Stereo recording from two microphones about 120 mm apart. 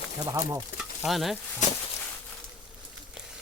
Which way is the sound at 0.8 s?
Centre (ahead or behind).